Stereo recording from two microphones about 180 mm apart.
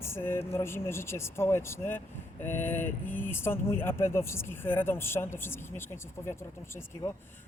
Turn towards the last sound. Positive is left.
turn(degrees=15)  # may be behind; listen again after turning